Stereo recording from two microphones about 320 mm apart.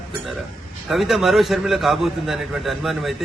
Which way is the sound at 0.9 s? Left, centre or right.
Centre.